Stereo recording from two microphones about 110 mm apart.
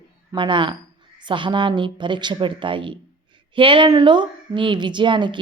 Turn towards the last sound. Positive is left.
turn(degrees=-45)  # may be behind; listen again after turning